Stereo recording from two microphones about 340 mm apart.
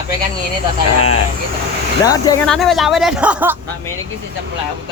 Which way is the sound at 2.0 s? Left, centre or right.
Centre.